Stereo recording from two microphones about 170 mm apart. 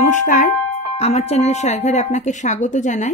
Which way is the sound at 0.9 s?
40° left (ahead or behind).